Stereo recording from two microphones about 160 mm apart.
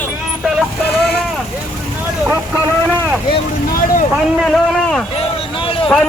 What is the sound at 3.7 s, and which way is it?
Vehicle, 60° left (ahead or behind).